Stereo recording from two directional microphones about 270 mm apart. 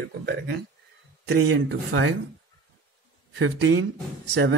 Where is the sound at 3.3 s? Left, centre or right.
Right.